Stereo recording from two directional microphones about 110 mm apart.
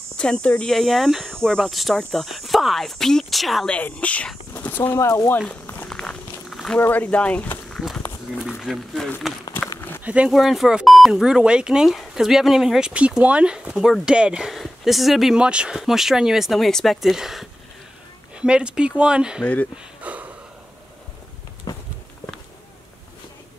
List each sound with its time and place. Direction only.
0.2 s speech: 10° left (ahead or behind)
3.7 s speech: 10° left (ahead or behind); by 5.3 s 30° left (ahead or behind)
5.5 s a sound: 15° left (ahead or behind)
5.9 s walk: 5° left (ahead or behind)
6.8 s speech: 15° left (ahead or behind)
7.7 s walk: centre (ahead or behind)
8.5 s speech: centre (ahead or behind)
9.8 s a sound: 20° left (ahead or behind)
10.0 s speech: 10° right (ahead or behind)
19.4 s speech: 15° left (ahead or behind)
20.0 s a sound: 15° right (ahead or behind)
21.7 s a sound: 30° left (ahead or behind)